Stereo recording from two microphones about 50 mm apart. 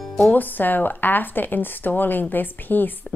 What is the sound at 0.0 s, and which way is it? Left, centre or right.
Music, centre.